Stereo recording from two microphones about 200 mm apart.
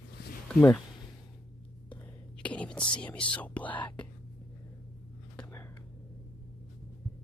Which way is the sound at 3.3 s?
5° left (ahead or behind).